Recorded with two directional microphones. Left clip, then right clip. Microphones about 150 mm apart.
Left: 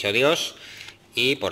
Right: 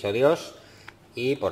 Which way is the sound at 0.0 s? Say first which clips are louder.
Left 1 dB; 5° left (ahead or behind).